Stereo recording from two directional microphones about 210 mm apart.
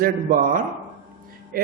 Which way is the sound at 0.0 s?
40° right (ahead or behind).